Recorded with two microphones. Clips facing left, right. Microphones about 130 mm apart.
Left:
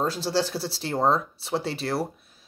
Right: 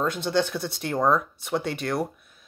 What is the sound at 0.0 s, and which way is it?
Speech, 35° left (ahead or behind).